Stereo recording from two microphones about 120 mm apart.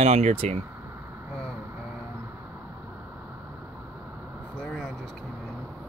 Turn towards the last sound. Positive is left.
turn(degrees=5)  # may be behind; listen again after turning